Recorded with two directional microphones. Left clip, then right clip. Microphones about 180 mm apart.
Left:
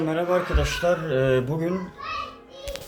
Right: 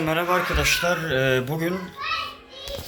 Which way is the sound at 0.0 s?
10° left (ahead or behind).